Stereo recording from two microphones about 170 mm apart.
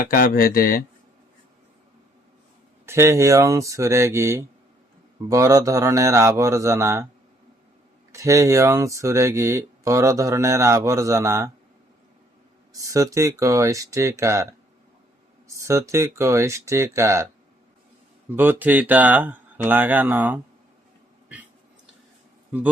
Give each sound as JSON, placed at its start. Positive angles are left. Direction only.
{"t": 0.0, "sound": "speech", "side_deg": 55}
{"t": 2.8, "sound": "speech", "side_deg": -15}
{"t": 8.1, "sound": "speech", "side_deg": -20}
{"t": 12.7, "sound": "speech", "side_deg": -20}
{"t": 15.5, "sound": "speech", "side_deg": -15}
{"t": 18.3, "sound": "speech", "side_deg": -10}